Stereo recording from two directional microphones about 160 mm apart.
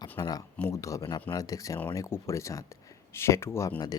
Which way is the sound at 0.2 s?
25° left (ahead or behind).